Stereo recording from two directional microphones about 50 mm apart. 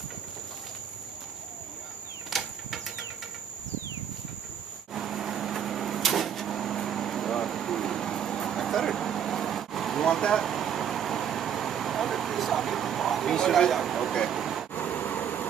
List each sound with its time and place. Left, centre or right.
2.3 s bird flight: centre
4.9 s cupboard open or close: centre
10.0 s vehicle: centre
14.7 s vehicle: left